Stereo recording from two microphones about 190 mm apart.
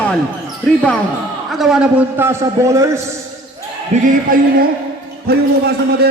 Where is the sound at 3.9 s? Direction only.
35° right (ahead or behind).